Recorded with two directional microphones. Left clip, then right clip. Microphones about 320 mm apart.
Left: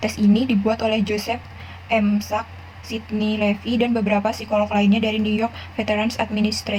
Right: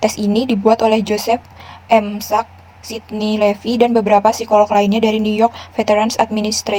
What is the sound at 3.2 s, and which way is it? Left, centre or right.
A woman's voice, right.